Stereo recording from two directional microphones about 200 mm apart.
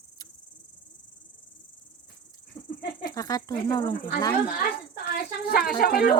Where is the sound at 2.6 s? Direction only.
40° left (ahead or behind).